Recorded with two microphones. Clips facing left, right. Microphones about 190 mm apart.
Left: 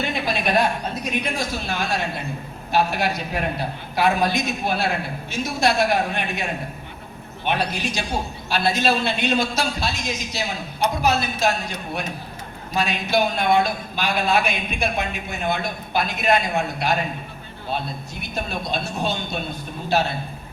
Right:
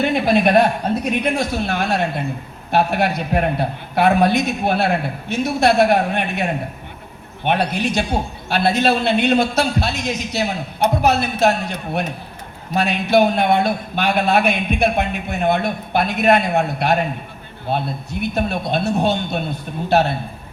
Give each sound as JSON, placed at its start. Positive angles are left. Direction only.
{"t": 0.0, "sound": "a man's voice", "side_deg": -55}